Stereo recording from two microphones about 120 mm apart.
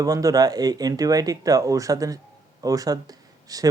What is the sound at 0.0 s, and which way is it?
Speech, 30° right (ahead or behind).